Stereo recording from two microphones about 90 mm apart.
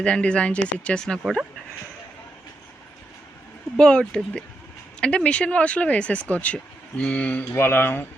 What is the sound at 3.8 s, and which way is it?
Speech, 10° left (ahead or behind).